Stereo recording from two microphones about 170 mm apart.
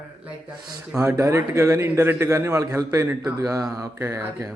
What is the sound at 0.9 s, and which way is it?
Speech, 15° right (ahead or behind).